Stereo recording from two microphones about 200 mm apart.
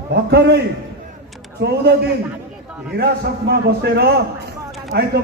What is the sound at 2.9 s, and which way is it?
A man's voice, 55° right (ahead or behind).